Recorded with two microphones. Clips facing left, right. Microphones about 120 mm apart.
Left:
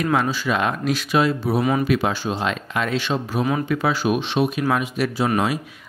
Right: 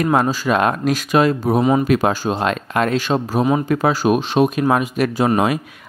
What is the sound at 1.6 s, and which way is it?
Speech, 25° right (ahead or behind).